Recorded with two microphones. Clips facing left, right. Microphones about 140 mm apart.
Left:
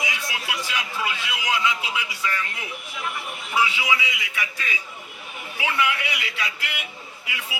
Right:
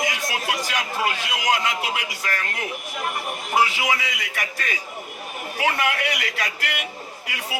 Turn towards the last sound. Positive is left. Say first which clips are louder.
# right 4 dB
turn(degrees=-45)  # may be behind; listen again after turning